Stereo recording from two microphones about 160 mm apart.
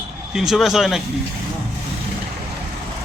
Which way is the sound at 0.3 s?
Centre (ahead or behind).